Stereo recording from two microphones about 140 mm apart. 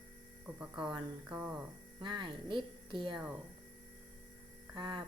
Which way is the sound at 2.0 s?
35° right (ahead or behind).